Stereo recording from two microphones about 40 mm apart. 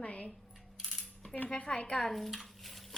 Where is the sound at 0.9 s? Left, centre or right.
Centre.